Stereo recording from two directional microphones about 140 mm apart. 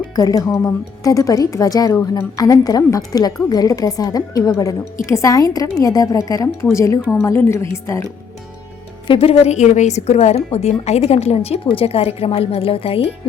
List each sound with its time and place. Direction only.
0.2 s a woman's voice: 25° left (ahead or behind)
9.0 s a woman's voice: 40° left (ahead or behind)